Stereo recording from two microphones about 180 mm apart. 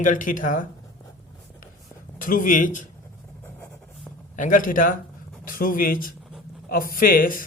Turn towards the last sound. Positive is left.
turn(degrees=50)  # may be behind; listen again after turning